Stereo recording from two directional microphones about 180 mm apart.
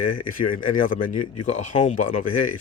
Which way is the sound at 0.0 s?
50° left (ahead or behind).